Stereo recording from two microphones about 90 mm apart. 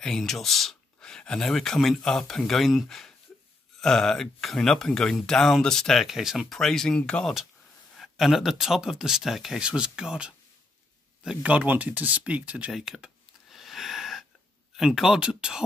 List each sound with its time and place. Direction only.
0.0 s speech: 5° left (ahead or behind)
7.9 s speech: centre (ahead or behind)
12.7 s a sound: 5° right (ahead or behind)
14.8 s speech: 5° right (ahead or behind)